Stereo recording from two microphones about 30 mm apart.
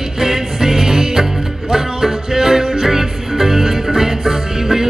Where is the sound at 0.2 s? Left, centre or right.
Centre.